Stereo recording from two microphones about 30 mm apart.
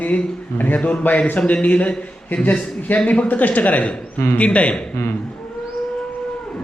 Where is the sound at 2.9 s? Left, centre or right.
Left.